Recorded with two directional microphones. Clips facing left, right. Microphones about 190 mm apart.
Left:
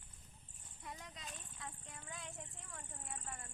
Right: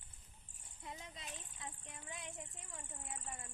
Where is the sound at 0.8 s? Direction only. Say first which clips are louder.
Right 1 dB; 25° right (ahead or behind).